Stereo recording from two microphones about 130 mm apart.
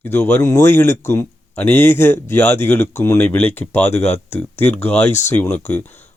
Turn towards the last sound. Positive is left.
turn(degrees=15)  # may be behind; listen again after turning